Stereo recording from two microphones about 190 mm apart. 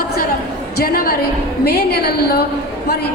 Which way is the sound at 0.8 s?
50° left (ahead or behind).